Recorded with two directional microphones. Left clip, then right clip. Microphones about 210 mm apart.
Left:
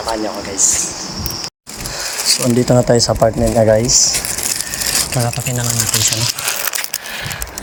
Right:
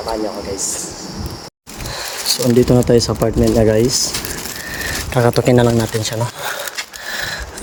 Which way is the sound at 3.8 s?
30° right (ahead or behind).